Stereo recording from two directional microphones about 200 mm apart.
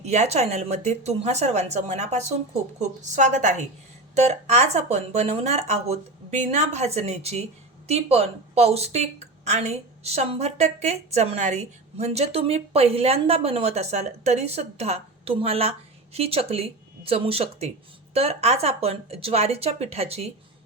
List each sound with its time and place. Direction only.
0.0 s a woman's voice: 35° right (ahead or behind)